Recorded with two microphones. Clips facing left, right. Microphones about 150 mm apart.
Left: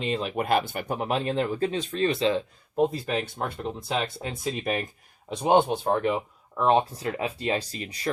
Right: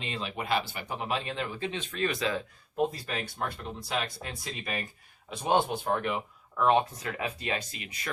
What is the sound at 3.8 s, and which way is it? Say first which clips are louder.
Speech: left 3 dB; 25° left (ahead or behind).